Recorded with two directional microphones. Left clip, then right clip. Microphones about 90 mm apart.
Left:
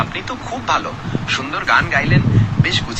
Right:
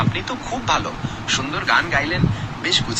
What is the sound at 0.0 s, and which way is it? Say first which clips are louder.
Speech: left 1 dB; centre (ahead or behind).